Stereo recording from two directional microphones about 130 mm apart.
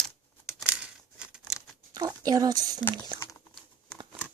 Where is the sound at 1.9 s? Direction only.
30° right (ahead or behind).